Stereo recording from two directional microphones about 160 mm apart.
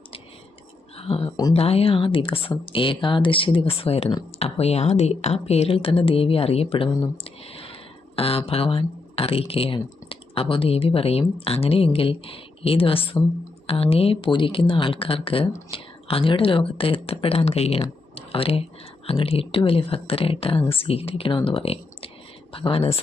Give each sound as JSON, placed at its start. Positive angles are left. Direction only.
{"t": 0.9, "sound": "speech", "side_deg": 35}
{"t": 18.1, "sound": "a sound", "side_deg": 35}
{"t": 19.0, "sound": "speech", "side_deg": 35}